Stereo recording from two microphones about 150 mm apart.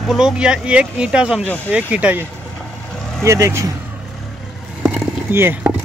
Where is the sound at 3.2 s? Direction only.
20° right (ahead or behind).